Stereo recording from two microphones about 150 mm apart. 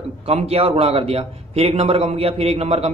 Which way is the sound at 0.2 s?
45° right (ahead or behind).